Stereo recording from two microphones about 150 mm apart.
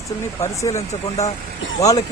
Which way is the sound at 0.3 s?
20° left (ahead or behind).